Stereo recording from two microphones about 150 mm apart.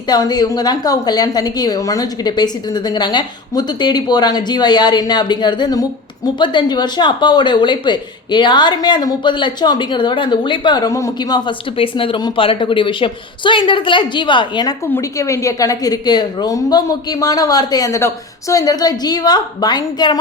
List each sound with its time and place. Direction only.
0.1 s a woman's voice: 25° left (ahead or behind)